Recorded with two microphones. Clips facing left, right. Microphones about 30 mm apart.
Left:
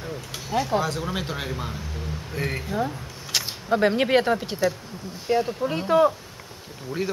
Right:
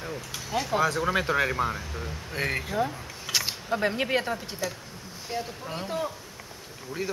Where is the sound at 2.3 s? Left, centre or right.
Right.